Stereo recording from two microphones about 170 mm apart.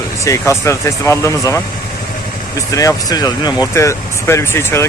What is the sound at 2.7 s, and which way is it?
Speech, 20° left (ahead or behind).